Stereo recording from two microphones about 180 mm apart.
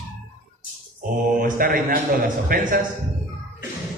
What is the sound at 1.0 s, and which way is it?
A man's voice, 50° right (ahead or behind).